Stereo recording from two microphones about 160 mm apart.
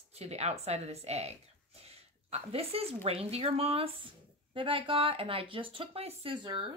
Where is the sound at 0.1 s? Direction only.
40° right (ahead or behind).